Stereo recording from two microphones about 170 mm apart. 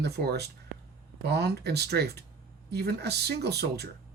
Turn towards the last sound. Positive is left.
turn(degrees=-70)  # may be behind; listen again after turning